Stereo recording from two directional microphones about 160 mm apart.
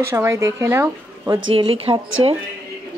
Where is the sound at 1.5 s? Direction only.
35° right (ahead or behind).